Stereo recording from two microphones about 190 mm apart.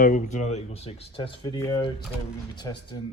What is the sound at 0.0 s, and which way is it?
Speech, 40° left (ahead or behind).